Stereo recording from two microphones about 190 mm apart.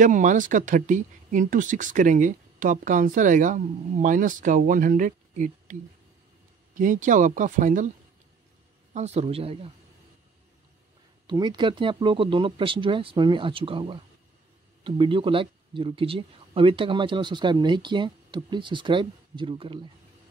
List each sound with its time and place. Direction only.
0.0 s speech: 40° right (ahead or behind)
8.9 s speech: 35° right (ahead or behind)
11.2 s speech: 25° right (ahead or behind)